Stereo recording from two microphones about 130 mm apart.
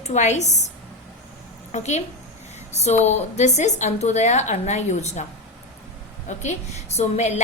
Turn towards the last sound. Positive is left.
turn(degrees=60)  # may be behind; listen again after turning